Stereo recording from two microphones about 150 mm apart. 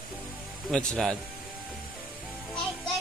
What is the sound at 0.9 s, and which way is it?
Speech, 5° left (ahead or behind).